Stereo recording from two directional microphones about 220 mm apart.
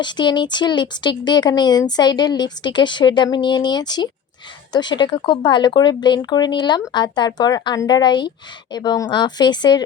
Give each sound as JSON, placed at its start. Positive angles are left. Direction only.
{"t": 0.0, "sound": "speech", "side_deg": 20}